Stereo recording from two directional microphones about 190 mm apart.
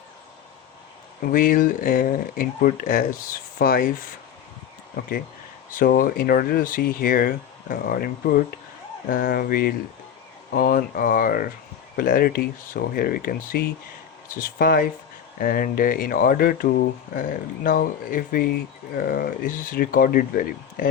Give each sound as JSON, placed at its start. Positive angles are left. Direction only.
{"t": 1.2, "sound": "speech", "side_deg": 45}
{"t": 5.7, "sound": "speech", "side_deg": 50}